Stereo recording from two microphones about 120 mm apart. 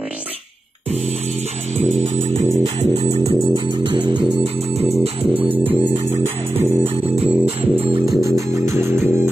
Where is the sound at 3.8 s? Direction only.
45° right (ahead or behind).